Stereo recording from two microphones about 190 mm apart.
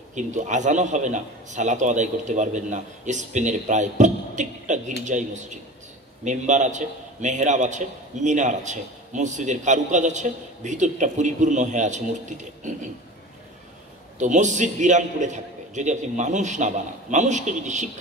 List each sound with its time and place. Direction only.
0.1 s a man's voice: 40° right (ahead or behind)
14.1 s a man's voice: 40° right (ahead or behind)